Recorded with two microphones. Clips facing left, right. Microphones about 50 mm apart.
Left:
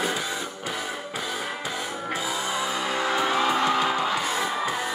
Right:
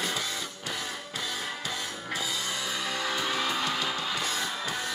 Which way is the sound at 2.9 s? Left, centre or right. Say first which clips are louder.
Left 7 dB; left.